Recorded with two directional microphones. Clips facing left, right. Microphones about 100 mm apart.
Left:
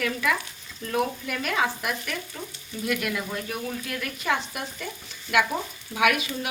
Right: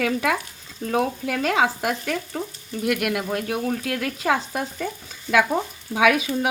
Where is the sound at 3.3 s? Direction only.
80° right.